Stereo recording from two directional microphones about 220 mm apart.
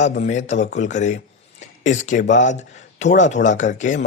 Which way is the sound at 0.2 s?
30° left (ahead or behind).